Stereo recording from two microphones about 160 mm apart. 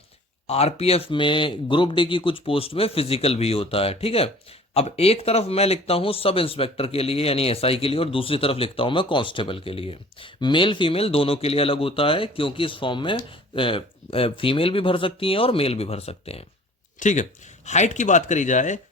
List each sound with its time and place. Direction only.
0.4 s a man's voice: 40° left (ahead or behind)
17.0 s speech: 50° left (ahead or behind)